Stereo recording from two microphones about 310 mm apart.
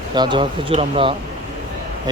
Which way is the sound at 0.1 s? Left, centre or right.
Centre.